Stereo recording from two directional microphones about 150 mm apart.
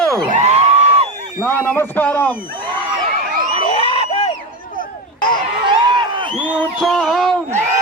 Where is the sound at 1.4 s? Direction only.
15° left (ahead or behind).